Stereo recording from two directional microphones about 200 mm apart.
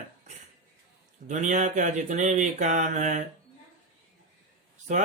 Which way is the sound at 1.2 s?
40° right (ahead or behind).